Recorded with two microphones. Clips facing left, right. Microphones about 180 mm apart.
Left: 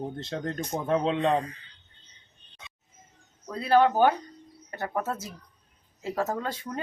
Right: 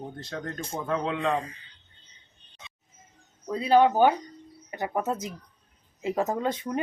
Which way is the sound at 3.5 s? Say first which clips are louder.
Right 1 dB; 15° right (ahead or behind).